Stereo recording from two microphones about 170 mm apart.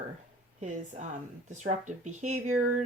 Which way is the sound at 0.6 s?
45° right (ahead or behind).